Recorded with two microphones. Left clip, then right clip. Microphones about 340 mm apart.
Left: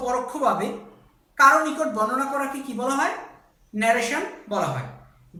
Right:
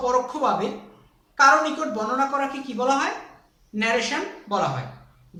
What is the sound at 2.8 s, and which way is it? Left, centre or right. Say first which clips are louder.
A man's voice: right 2 dB; centre.